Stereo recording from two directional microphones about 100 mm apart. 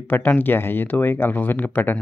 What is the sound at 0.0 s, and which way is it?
Speech, 20° left (ahead or behind).